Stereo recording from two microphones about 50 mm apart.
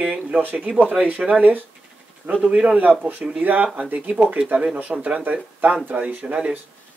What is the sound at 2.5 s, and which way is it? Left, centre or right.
Speech, right.